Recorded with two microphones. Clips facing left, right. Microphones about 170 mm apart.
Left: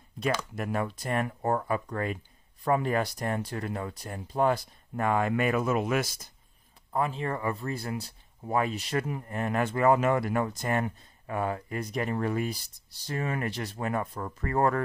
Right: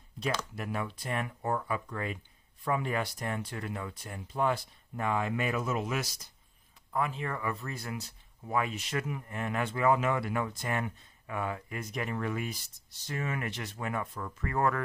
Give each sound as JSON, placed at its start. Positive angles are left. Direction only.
{"t": 0.2, "sound": "speech", "side_deg": 50}
{"t": 6.9, "sound": "speech", "side_deg": 30}